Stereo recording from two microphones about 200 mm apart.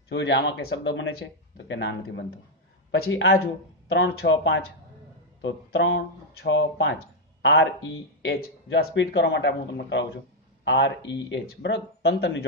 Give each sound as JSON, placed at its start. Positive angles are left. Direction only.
{"t": 0.1, "sound": "speech", "side_deg": 60}
{"t": 3.0, "sound": "speech", "side_deg": 70}
{"t": 5.4, "sound": "speech", "side_deg": 70}